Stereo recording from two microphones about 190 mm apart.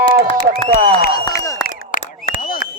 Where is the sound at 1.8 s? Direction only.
45° left (ahead or behind).